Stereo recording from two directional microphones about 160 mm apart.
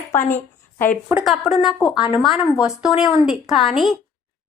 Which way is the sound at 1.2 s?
Centre (ahead or behind).